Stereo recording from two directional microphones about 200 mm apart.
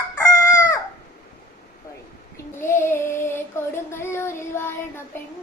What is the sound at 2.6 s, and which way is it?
Child singing, 10° left (ahead or behind).